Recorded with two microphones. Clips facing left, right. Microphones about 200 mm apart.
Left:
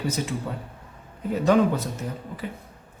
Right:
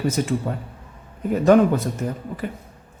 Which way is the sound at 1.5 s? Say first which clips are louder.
Right 5 dB; 55° right (ahead or behind).